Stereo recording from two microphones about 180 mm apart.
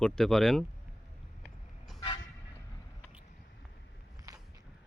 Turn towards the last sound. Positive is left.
turn(degrees=-20)  # may be behind; listen again after turning